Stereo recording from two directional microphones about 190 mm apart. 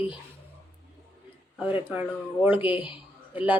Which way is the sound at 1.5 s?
10° right (ahead or behind).